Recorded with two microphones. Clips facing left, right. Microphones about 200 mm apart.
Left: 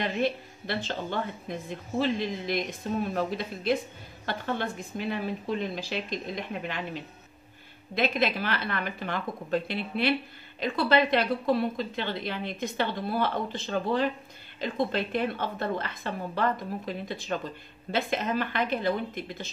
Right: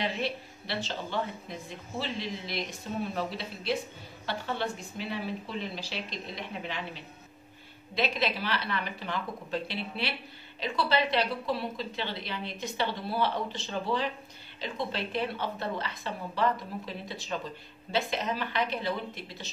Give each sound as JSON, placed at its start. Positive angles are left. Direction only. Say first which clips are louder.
{"t": 0.0, "sound": "a woman's voice", "louder": "left 4 dB", "side_deg": 50}
{"t": 7.9, "sound": "a woman's voice", "louder": "left 3 dB", "side_deg": 50}